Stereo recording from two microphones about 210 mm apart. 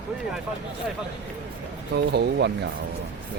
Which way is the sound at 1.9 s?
50° right (ahead or behind).